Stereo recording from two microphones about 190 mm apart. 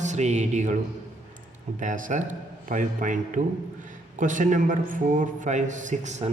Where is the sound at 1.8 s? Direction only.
40° right (ahead or behind).